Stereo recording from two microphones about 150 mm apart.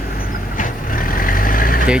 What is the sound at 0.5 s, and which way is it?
Vehicle, 65° left (ahead or behind).